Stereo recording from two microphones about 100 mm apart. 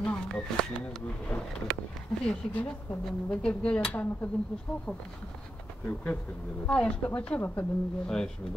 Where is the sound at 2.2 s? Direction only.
10° left (ahead or behind).